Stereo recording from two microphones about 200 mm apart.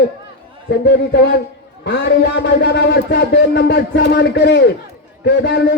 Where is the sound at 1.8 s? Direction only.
55° left (ahead or behind).